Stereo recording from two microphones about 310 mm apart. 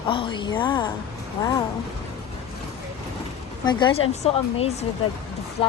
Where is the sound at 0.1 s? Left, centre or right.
Centre.